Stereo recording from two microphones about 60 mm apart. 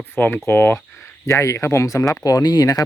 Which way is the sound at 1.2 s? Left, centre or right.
Left.